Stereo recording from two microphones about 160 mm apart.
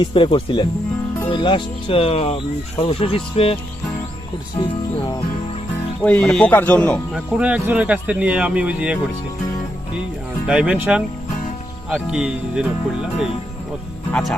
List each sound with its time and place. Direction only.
0.0 s speech: 30° left (ahead or behind)
6.0 s speech: 10° left (ahead or behind)
7.3 s speech: 10° right (ahead or behind)
10.4 s speech: 5° right (ahead or behind)